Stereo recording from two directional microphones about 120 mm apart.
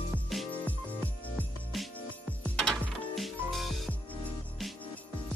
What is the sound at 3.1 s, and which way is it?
Music, centre (ahead or behind).